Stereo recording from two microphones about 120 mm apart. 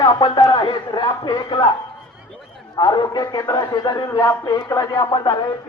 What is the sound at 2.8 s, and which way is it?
Speech, 35° left (ahead or behind).